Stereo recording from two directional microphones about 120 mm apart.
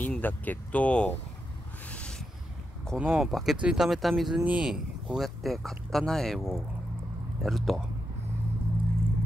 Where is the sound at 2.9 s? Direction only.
10° right (ahead or behind).